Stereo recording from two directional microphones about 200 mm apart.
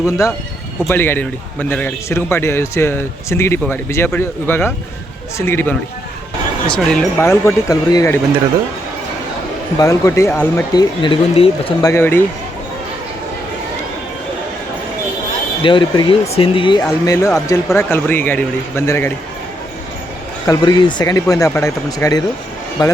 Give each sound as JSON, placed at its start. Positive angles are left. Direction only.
{"t": 0.0, "sound": "a man's voice", "side_deg": 15}
{"t": 6.7, "sound": "a man's voice", "side_deg": 10}
{"t": 9.7, "sound": "a man's voice", "side_deg": 15}
{"t": 11.0, "sound": "a man's voice", "side_deg": 25}
{"t": 15.6, "sound": "a man's voice", "side_deg": 25}
{"t": 20.5, "sound": "a man's voice", "side_deg": 20}